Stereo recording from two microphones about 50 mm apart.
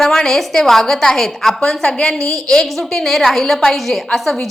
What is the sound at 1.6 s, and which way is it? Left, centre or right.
Speech, centre.